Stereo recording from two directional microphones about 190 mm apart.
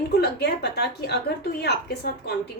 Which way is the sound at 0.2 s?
60° left (ahead or behind).